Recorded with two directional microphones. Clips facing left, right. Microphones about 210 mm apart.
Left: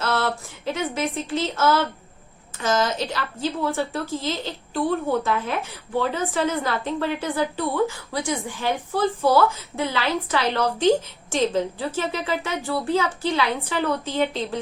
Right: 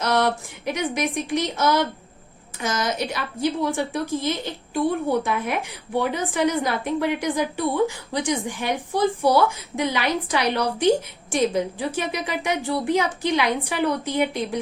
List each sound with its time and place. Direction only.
0.0 s a woman's voice: 15° right (ahead or behind)